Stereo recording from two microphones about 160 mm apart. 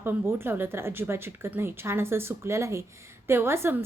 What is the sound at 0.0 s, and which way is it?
A woman's voice, 15° right (ahead or behind).